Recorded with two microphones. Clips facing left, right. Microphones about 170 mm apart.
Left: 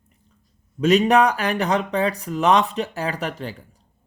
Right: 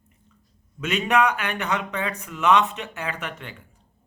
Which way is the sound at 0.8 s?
35° left (ahead or behind).